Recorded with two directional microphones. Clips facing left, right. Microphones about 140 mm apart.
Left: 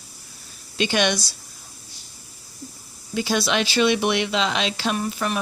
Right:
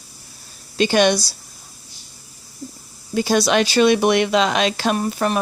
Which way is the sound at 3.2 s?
40° right (ahead or behind).